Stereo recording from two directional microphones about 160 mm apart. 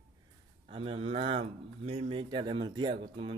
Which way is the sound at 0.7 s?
35° right (ahead or behind).